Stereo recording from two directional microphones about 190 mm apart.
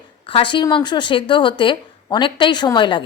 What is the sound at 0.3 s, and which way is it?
Speech, 25° left (ahead or behind).